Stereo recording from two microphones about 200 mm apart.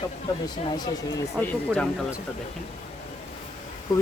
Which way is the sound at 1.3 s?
5° left (ahead or behind).